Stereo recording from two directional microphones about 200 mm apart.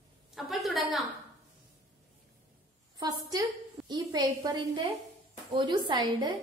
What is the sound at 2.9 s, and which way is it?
A woman's voice, 20° right (ahead or behind).